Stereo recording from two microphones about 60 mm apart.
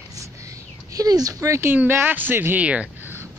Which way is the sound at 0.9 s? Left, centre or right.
Right.